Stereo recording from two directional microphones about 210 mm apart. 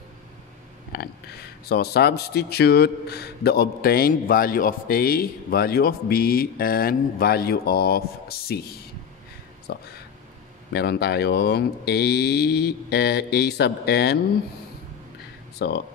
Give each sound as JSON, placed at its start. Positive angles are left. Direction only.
{"t": 0.9, "sound": "a man's voice", "side_deg": 50}
{"t": 9.7, "sound": "a man's voice", "side_deg": 50}
{"t": 15.6, "sound": "a man's voice", "side_deg": 55}